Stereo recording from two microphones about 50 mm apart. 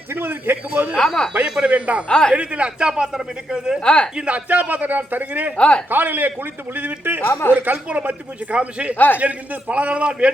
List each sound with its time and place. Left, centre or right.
0.1 s a man's voice: right
0.9 s speech: centre
1.5 s a man's voice: centre
2.0 s speech: centre
2.3 s speech: right
3.8 s a woman's voice: centre
4.3 s a man's voice: right
5.5 s a woman's voice: left
5.9 s a man's voice: right
7.3 s a woman's voice: left
7.5 s a man's voice: right
7.9 s a man's voice: right